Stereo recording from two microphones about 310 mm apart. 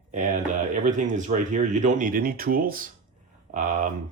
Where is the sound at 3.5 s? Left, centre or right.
Right.